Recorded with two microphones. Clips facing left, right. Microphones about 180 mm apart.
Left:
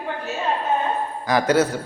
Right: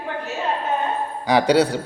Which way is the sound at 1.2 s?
70° right (ahead or behind).